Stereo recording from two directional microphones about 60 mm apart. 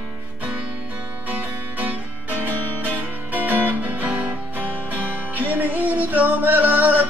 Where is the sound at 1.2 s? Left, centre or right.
Right.